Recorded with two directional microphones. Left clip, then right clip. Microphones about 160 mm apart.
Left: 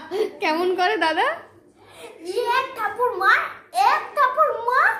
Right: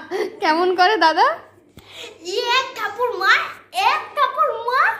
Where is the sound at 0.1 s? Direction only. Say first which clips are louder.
Right 3 dB; 30° right (ahead or behind).